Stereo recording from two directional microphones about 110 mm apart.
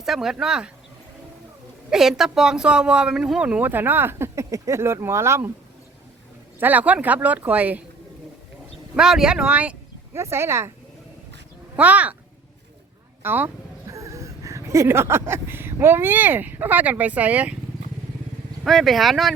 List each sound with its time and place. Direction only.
0.0 s speech: 5° right (ahead or behind)
1.9 s speech: 5° right (ahead or behind); by 5.5 s 25° right (ahead or behind)
6.6 s speech: 15° right (ahead or behind)
9.0 s speech: 5° right (ahead or behind)
10.2 s speech: 25° right (ahead or behind)
11.8 s speech: 15° right (ahead or behind)
13.2 s speech: 15° right (ahead or behind)
13.9 s speech: 30° right (ahead or behind); by 17.6 s 15° right (ahead or behind)
18.6 s speech: centre (ahead or behind)